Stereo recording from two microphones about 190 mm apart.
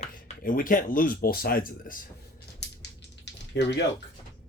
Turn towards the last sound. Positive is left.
turn(degrees=65)  # may be behind; listen again after turning